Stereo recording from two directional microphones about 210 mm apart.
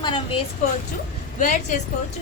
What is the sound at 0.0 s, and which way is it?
Speech, 25° left (ahead or behind).